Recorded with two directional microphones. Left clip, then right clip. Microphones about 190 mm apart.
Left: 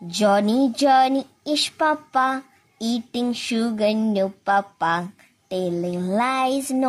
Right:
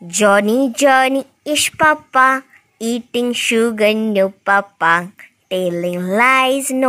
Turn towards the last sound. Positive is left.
turn(degrees=-35)  # may be behind; listen again after turning